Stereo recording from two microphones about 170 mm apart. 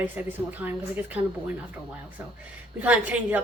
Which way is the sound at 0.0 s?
10° right (ahead or behind).